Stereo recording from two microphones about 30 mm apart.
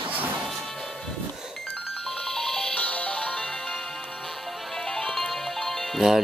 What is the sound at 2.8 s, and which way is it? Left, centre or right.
Music, left.